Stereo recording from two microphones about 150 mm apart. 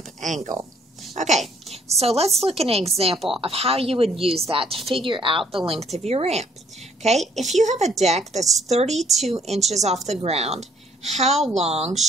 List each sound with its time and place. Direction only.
0.2 s speech: 55° right (ahead or behind)
1.1 s a sound: 50° right (ahead or behind)
1.7 s a woman's voice: 45° right (ahead or behind)
5.7 s a woman's voice: 45° right (ahead or behind)
9.0 s speech: centre (ahead or behind)
9.7 s a woman's voice: 45° right (ahead or behind)